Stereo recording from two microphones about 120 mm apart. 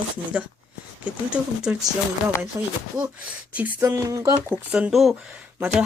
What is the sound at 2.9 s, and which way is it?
Speech, 10° right (ahead or behind).